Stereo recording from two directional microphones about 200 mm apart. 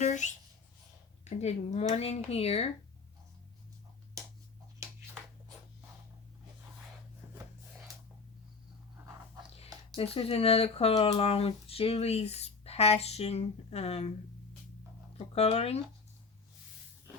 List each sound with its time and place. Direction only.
0.0 s a sound: 40° left (ahead or behind)
1.2 s speech: 35° left (ahead or behind)
9.9 s speech: 30° left (ahead or behind)
15.4 s speech: 30° left (ahead or behind)